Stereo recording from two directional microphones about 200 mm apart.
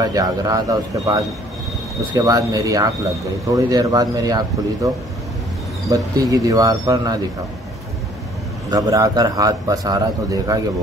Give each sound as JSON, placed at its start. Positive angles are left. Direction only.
{"t": 0.0, "sound": "a man's voice", "side_deg": -20}
{"t": 8.6, "sound": "a man's voice", "side_deg": -20}